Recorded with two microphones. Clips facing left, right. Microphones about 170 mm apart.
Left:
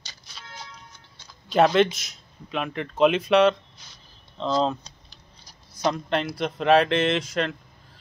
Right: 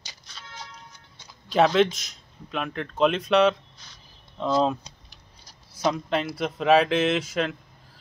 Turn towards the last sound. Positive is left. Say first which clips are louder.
# even
turn(degrees=-5)  # may be behind; listen again after turning